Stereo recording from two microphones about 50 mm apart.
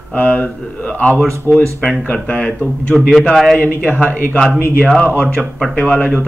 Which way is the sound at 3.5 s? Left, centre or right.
Left.